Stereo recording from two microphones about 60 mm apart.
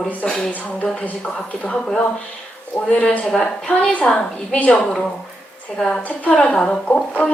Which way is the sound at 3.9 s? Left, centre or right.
Left.